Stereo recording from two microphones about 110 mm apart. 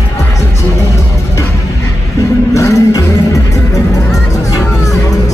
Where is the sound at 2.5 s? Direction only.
30° left (ahead or behind).